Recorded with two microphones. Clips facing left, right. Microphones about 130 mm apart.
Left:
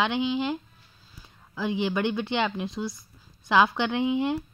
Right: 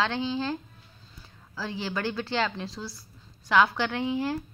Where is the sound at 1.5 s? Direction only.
20° left (ahead or behind).